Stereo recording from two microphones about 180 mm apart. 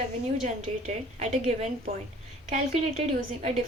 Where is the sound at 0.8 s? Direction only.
40° right (ahead or behind).